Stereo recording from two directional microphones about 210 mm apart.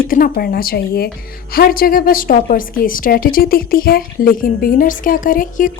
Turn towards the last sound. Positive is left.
turn(degrees=40)  # may be behind; listen again after turning